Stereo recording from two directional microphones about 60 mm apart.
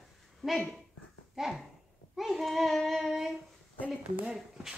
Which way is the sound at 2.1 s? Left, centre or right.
Centre.